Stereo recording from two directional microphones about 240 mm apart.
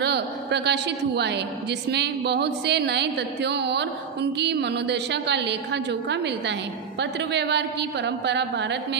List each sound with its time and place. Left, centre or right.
0.0 s a woman's voice: right